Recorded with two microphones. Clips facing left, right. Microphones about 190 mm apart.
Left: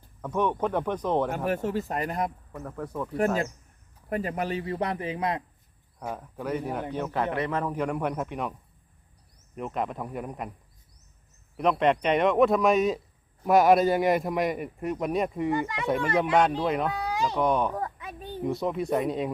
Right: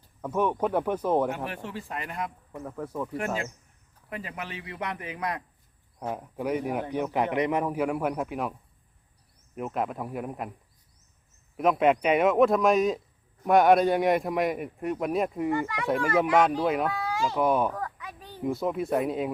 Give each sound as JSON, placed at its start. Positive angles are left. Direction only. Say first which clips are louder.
{"t": 0.2, "sound": "speech", "louder": "even", "side_deg": -10}
{"t": 1.3, "sound": "a man's voice", "louder": "left 6 dB", "side_deg": 45}
{"t": 2.6, "sound": "a man's voice", "louder": "even", "side_deg": -5}
{"t": 3.2, "sound": "a man's voice", "louder": "left 9 dB", "side_deg": 40}
{"t": 6.1, "sound": "speech", "louder": "right 2 dB", "side_deg": -15}
{"t": 9.6, "sound": "a man's voice", "louder": "right 1 dB", "side_deg": -5}
{"t": 11.5, "sound": "a man's voice", "louder": "right 1 dB", "side_deg": -5}
{"t": 15.5, "sound": "a child's voice", "louder": "even", "side_deg": 20}
{"t": 16.6, "sound": "a man's voice", "louder": "right 1 dB", "side_deg": -5}
{"t": 16.9, "sound": "speech", "louder": "even", "side_deg": 20}
{"t": 17.3, "sound": "a man's voice", "louder": "right 1 dB", "side_deg": -5}
{"t": 17.7, "sound": "a sound", "louder": "left 2 dB", "side_deg": 25}
{"t": 18.4, "sound": "a man's voice", "louder": "even", "side_deg": -5}